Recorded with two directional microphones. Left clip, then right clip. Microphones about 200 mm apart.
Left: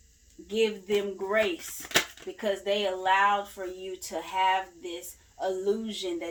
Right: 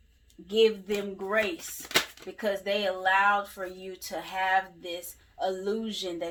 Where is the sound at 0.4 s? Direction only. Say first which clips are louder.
Right 4 dB; 25° right (ahead or behind).